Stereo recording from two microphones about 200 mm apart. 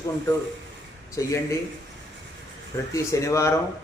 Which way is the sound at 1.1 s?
15° left (ahead or behind).